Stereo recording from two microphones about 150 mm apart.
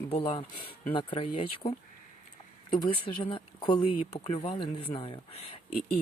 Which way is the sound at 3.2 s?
35° left (ahead or behind).